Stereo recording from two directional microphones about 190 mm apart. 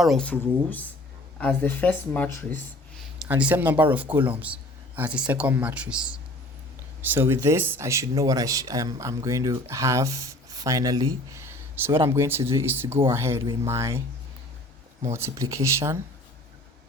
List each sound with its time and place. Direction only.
0.0 s speech: centre (ahead or behind)
3.2 s speech: 5° right (ahead or behind)
15.0 s speech: 15° right (ahead or behind)